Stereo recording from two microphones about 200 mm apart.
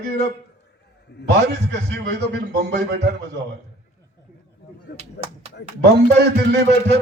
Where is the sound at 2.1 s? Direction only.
55° right (ahead or behind).